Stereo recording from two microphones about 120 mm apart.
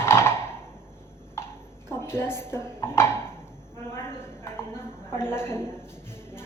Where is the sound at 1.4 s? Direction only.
20° left (ahead or behind).